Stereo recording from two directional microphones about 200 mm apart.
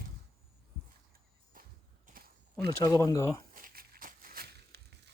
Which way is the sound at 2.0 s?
45° right (ahead or behind).